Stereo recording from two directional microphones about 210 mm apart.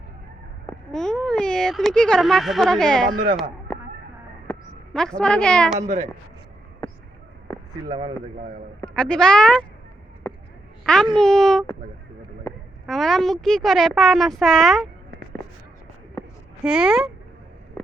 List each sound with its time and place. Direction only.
0.7 s speech: 5° left (ahead or behind)
3.1 s speech: 40° right (ahead or behind)
4.9 s a woman's voice: 5° left (ahead or behind)
5.8 s speech: 35° right (ahead or behind)
7.9 s speech: 20° right (ahead or behind)
8.8 s a woman's voice: 5° left (ahead or behind)
10.8 s a child's voice: 5° left (ahead or behind)
12.8 s a woman's voice: centre (ahead or behind)
16.6 s a woman's voice: 5° right (ahead or behind)
17.8 s a sound: 10° left (ahead or behind)